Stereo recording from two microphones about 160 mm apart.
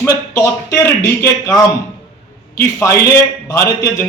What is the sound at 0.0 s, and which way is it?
A man's voice, 15° left (ahead or behind).